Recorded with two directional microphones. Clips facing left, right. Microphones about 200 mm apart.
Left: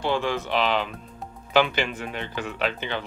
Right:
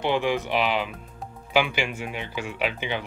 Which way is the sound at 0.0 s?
15° right (ahead or behind).